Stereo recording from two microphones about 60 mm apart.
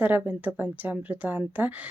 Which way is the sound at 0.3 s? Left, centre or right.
Right.